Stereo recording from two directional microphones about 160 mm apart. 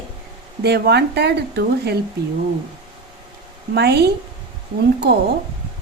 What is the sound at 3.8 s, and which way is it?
Speech, 90° right.